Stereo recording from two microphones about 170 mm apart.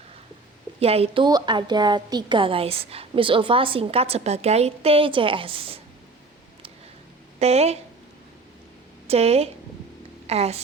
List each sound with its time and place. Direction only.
0.8 s a woman's voice: 35° right (ahead or behind)
7.3 s speech: 40° right (ahead or behind)
9.0 s a woman's voice: 35° right (ahead or behind)